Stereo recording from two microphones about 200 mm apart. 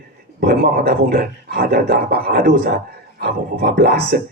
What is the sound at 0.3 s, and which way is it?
Speech, 50° right (ahead or behind).